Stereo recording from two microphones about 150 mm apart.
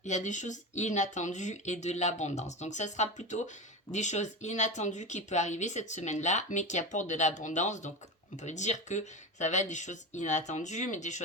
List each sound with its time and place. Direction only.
0.0 s speech: 55° left (ahead or behind)